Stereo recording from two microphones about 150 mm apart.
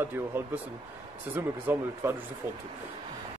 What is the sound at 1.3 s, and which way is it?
Speech, 15° right (ahead or behind).